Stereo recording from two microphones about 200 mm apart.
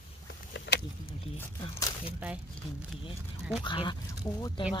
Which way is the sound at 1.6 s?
20° left (ahead or behind).